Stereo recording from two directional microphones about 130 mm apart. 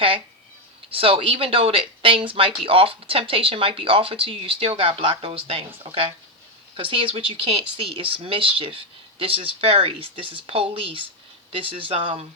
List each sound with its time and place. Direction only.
0.9 s speech: 45° right (ahead or behind)